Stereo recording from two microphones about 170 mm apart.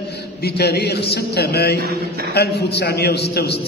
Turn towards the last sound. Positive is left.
turn(degrees=65)  # may be behind; listen again after turning